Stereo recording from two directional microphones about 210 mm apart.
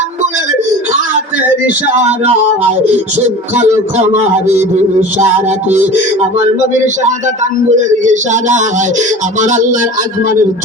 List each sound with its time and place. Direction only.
3.6 s speech: 35° right (ahead or behind)